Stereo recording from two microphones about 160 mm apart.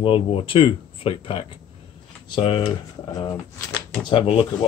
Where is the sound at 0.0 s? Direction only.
35° left (ahead or behind).